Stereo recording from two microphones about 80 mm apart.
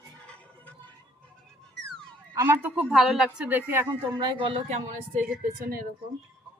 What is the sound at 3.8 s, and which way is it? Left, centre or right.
Speech, right.